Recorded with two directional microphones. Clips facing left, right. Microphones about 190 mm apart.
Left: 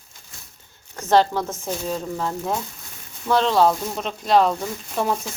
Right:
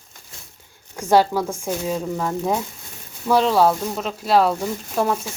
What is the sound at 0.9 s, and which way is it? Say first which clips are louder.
Speech: right 1 dB; 10° right (ahead or behind).